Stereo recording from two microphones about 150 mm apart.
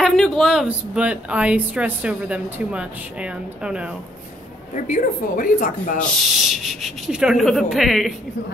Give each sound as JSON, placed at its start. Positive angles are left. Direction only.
{"t": 0.0, "sound": "speech", "side_deg": 0}
{"t": 4.7, "sound": "speech", "side_deg": 60}
{"t": 5.9, "sound": "speech", "side_deg": 0}